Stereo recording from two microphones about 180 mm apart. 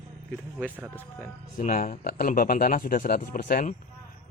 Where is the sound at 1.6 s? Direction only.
50° left (ahead or behind).